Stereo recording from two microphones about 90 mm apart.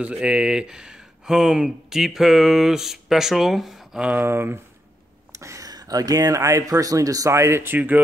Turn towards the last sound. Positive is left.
turn(degrees=-20)  # may be behind; listen again after turning